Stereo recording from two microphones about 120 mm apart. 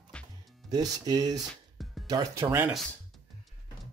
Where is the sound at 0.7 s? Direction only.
30° right (ahead or behind).